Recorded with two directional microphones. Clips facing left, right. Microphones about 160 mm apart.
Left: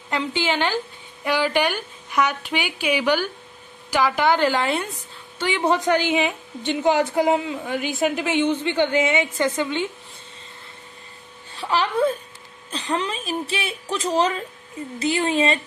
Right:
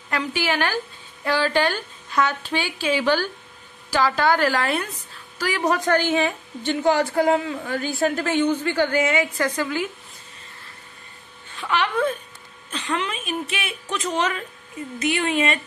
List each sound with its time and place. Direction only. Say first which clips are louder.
0.1 s a woman's voice: left 1 dB; 25° left (ahead or behind)
11.5 s a woman's voice: left 1 dB; 35° left (ahead or behind)